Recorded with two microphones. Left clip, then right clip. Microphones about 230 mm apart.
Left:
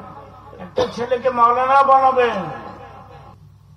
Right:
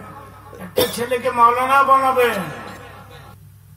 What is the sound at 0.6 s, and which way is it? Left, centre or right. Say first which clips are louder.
A man's voice: right 1 dB; right.